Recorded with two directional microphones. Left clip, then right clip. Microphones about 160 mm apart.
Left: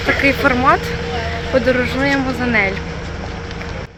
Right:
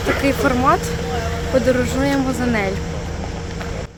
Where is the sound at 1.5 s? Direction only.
10° right (ahead or behind).